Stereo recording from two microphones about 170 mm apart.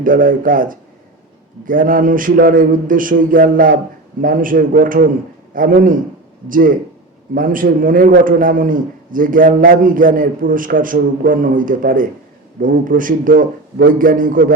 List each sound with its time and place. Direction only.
0.0 s a man's voice: 55° right (ahead or behind)